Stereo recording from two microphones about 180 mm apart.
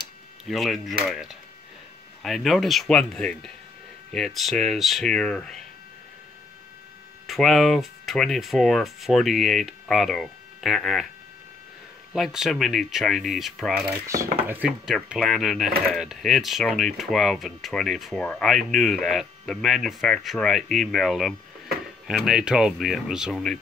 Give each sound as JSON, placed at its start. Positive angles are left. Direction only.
{"t": 0.5, "sound": "speech", "side_deg": 0}
{"t": 7.2, "sound": "speech", "side_deg": 0}
{"t": 12.1, "sound": "speech", "side_deg": -5}
{"t": 14.0, "sound": "chopping", "side_deg": -15}
{"t": 15.0, "sound": "speech", "side_deg": 0}